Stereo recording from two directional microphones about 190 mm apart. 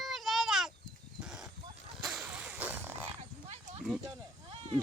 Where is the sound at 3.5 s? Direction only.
35° right (ahead or behind).